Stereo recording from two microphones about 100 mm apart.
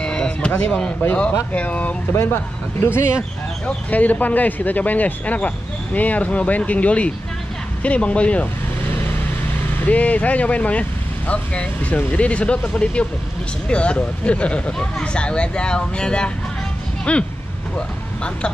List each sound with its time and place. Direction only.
0.0 s a sound: 10° left (ahead or behind)
0.7 s speech: 10° left (ahead or behind)
9.8 s speech: 15° left (ahead or behind)